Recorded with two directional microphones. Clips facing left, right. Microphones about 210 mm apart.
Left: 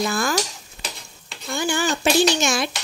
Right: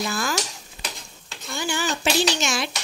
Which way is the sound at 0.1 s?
50° left (ahead or behind).